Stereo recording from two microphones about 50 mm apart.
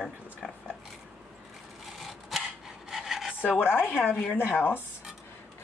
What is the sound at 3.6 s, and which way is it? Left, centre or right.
Speech, left.